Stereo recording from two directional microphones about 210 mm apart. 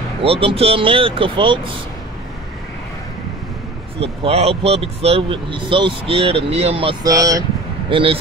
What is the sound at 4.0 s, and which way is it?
Speech, 30° right (ahead or behind).